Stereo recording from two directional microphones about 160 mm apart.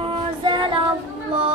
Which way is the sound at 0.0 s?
30° right (ahead or behind).